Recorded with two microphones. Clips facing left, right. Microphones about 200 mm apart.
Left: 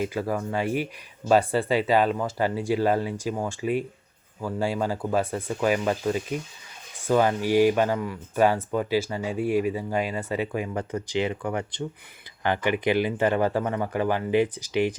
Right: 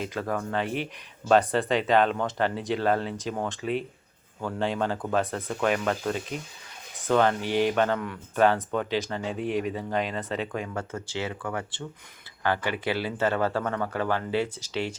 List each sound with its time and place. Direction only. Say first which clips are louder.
0.0 s speech: left 3 dB; 10° left (ahead or behind)